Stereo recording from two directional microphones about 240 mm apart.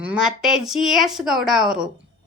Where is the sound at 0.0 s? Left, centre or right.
Centre.